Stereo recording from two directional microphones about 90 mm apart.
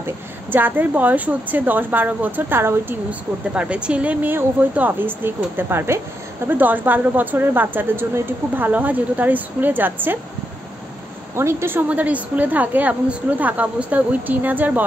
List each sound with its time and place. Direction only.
0.0 s a woman's voice: 20° right (ahead or behind)
3.5 s a woman's voice: 10° right (ahead or behind)
11.3 s a woman's voice: 25° right (ahead or behind)